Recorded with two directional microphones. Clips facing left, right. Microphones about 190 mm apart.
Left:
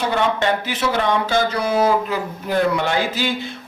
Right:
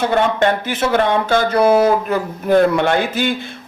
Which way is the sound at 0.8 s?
55° right (ahead or behind).